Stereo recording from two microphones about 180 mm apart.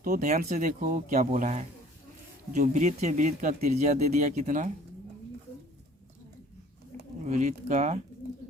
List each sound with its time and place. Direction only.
0.0 s speech: 50° right (ahead or behind)
7.3 s speech: 40° right (ahead or behind)